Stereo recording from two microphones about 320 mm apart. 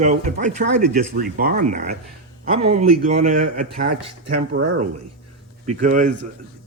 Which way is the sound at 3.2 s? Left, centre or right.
Right.